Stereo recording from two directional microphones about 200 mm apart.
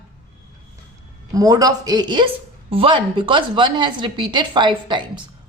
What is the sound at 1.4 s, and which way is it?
A woman's voice, 20° right (ahead or behind).